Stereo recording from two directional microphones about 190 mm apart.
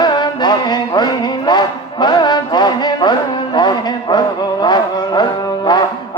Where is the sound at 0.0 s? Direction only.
25° left (ahead or behind).